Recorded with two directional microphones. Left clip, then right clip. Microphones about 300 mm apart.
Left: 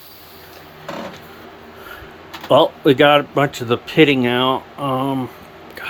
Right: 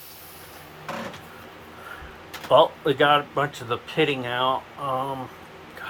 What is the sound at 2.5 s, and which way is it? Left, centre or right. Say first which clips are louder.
Speech: left 5 dB; left.